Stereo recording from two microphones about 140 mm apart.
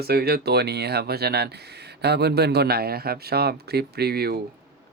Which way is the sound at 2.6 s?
90° right.